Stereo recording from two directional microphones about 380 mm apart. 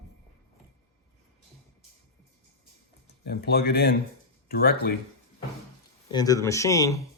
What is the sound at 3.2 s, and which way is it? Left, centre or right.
Speech, left.